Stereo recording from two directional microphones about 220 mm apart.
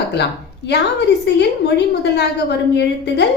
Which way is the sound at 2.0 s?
50° left (ahead or behind).